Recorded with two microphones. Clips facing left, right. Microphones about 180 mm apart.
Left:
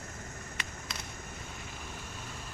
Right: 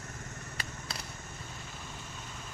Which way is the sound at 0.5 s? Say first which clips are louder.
Right 2 dB; 35° right (ahead or behind).